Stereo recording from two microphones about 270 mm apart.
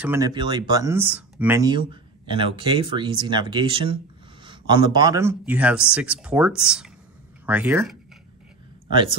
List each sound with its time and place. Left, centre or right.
0.0 s speech: centre